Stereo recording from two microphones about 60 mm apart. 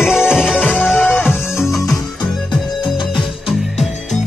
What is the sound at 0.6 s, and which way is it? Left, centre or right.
Music, left.